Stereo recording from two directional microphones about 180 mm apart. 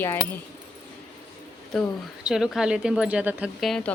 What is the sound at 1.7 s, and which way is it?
Speech, centre (ahead or behind).